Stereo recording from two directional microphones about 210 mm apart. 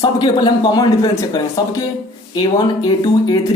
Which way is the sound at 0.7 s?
20° left (ahead or behind).